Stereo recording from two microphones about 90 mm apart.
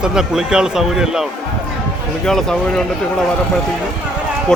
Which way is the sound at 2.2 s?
5° left (ahead or behind).